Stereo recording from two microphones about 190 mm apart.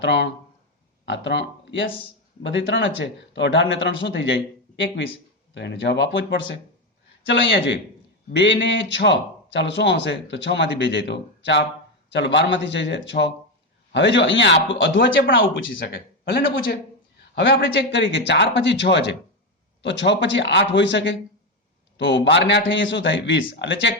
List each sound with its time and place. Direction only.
0.0 s speech: 65° left (ahead or behind)
5.5 s speech: 65° left (ahead or behind)
15.8 s speech: 55° left (ahead or behind)
17.3 s speech: 70° left (ahead or behind)